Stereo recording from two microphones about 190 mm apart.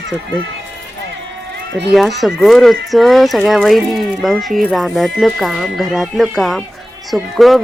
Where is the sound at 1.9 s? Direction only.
Centre (ahead or behind).